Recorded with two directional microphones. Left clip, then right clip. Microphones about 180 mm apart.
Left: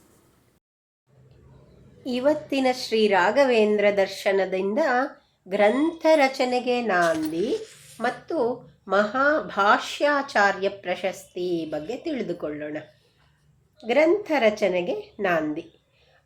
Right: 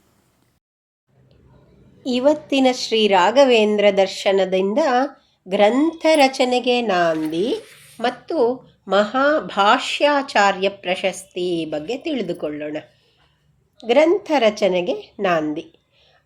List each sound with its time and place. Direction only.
2.0 s a woman's voice: 25° right (ahead or behind)